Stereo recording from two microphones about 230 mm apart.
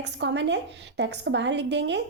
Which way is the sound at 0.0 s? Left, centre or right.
Right.